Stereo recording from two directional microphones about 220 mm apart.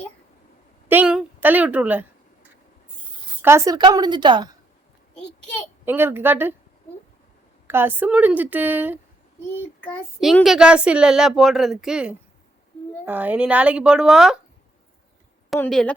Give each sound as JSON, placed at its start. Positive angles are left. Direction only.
{"t": 0.9, "sound": "a sound", "side_deg": -5}
{"t": 3.4, "sound": "a woman's voice", "side_deg": -15}
{"t": 5.1, "sound": "a child's voice", "side_deg": 5}
{"t": 5.8, "sound": "a woman's voice", "side_deg": -10}
{"t": 7.7, "sound": "a woman's voice", "side_deg": -10}
{"t": 9.8, "sound": "speech", "side_deg": 5}
{"t": 15.5, "sound": "speech", "side_deg": 5}